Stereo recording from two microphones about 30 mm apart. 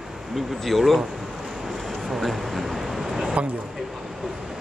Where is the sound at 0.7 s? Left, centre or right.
Centre.